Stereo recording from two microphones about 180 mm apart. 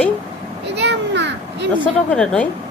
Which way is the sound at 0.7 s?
75° right (ahead or behind).